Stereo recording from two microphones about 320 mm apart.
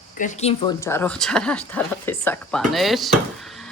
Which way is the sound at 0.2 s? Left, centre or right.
Left.